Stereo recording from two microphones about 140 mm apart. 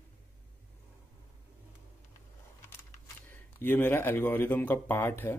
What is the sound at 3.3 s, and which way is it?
Speech, 15° left (ahead or behind).